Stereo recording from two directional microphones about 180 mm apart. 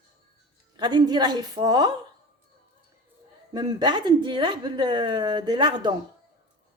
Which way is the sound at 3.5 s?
25° right (ahead or behind).